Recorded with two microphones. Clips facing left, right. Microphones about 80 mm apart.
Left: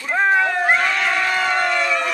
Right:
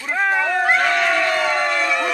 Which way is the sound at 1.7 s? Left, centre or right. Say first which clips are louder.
Even; centre.